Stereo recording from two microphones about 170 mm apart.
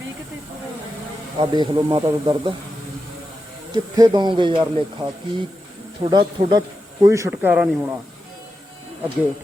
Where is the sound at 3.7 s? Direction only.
25° right (ahead or behind).